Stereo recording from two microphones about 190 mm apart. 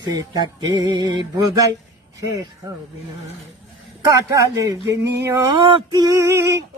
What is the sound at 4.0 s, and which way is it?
Male singing, 15° right (ahead or behind).